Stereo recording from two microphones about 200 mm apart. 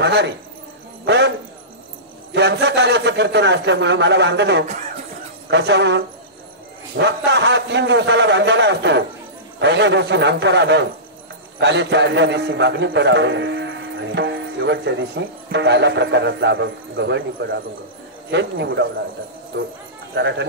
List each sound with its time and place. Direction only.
0.0 s a man's voice: 60° right (ahead or behind)
1.0 s a sound: 60° right (ahead or behind)
2.3 s a man's voice: 60° right (ahead or behind)
20.2 s a man's voice: 60° right (ahead or behind)